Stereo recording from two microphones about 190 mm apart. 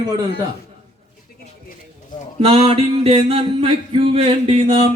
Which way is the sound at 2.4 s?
30° right (ahead or behind).